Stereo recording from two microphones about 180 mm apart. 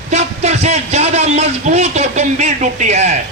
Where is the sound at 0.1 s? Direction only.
40° right (ahead or behind).